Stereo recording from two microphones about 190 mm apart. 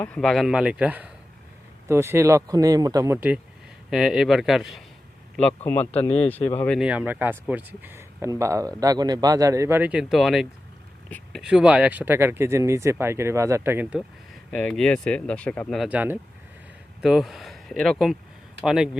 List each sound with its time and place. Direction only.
0.0 s speech: 5° left (ahead or behind)
5.7 s speech: 10° left (ahead or behind)
6.1 s speech: 30° left (ahead or behind)
6.6 s speech: centre (ahead or behind)
14.5 s speech: 5° left (ahead or behind)